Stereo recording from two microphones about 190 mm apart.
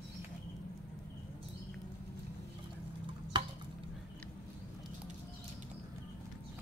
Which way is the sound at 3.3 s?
25° right (ahead or behind).